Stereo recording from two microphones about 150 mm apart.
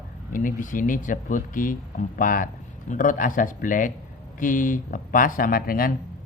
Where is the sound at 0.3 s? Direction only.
60° left (ahead or behind).